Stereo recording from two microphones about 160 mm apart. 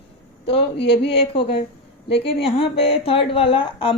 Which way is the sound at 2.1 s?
35° left (ahead or behind).